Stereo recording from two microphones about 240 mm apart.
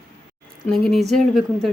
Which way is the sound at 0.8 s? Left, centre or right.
Centre.